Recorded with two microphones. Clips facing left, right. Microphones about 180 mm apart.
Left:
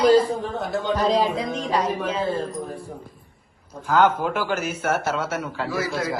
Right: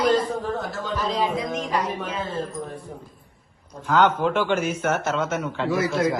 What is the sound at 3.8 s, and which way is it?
A man's voice, 10° left (ahead or behind).